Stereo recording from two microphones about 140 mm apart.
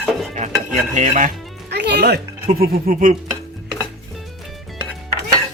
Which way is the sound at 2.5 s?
90° right.